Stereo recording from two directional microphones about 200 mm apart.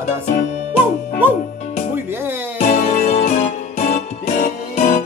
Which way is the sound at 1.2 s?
10° right (ahead or behind).